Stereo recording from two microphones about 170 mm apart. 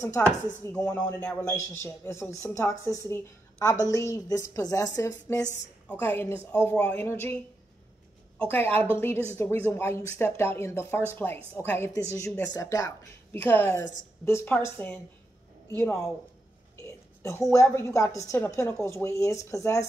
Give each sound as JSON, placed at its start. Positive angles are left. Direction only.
{"t": 0.0, "sound": "a woman's voice", "side_deg": 15}
{"t": 8.4, "sound": "a woman's voice", "side_deg": 10}